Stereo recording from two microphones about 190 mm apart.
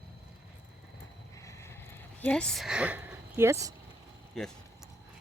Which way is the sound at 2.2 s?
5° left (ahead or behind).